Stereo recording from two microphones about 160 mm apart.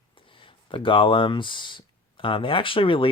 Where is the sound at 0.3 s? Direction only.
30° left (ahead or behind).